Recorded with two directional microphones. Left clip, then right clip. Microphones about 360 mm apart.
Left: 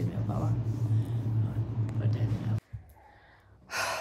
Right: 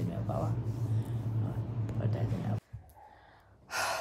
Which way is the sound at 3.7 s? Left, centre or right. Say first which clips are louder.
Left 1 dB; centre.